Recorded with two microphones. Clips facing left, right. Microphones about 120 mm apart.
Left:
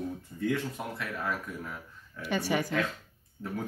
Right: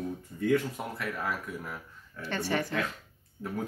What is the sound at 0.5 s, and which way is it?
Speech, 10° right (ahead or behind).